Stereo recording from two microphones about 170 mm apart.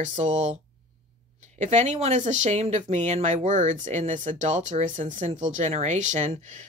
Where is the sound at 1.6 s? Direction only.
40° right (ahead or behind).